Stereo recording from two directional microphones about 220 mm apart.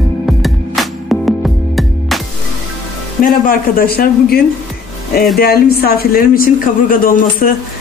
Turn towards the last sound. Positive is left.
turn(degrees=40)  # may be behind; listen again after turning